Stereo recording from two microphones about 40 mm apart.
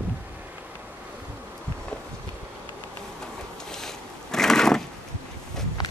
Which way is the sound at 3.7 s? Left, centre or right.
Centre.